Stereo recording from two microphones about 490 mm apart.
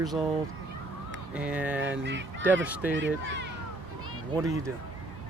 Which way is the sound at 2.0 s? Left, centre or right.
Right.